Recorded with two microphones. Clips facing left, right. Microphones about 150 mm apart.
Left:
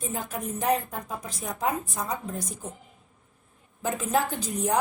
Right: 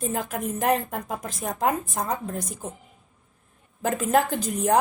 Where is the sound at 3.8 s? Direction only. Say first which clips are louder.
Right 4 dB; 55° right (ahead or behind).